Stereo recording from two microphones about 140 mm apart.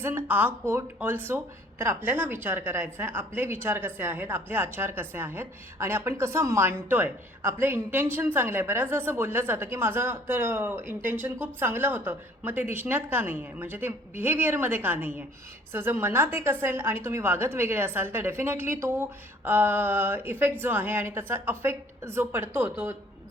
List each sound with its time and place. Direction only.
0.0 s a woman's voice: 15° right (ahead or behind)